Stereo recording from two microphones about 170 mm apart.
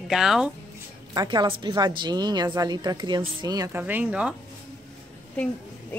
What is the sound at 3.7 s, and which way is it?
Speech, 10° right (ahead or behind).